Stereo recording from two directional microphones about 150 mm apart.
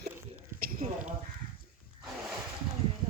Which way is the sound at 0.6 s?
75° right (ahead or behind).